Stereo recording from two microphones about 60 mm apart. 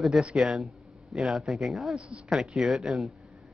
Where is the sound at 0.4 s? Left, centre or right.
Centre.